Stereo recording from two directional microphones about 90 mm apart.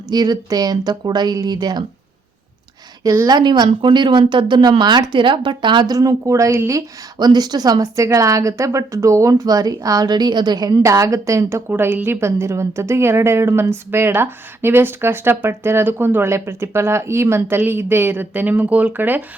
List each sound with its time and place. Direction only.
0.1 s speech: 50° right (ahead or behind)
3.2 s speech: 55° right (ahead or behind); by 6.8 s 40° right (ahead or behind)
7.2 s a woman's voice: 50° right (ahead or behind); by 19.2 s 20° right (ahead or behind)